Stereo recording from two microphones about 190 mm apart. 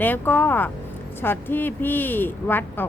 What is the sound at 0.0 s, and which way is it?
Speech, 10° left (ahead or behind).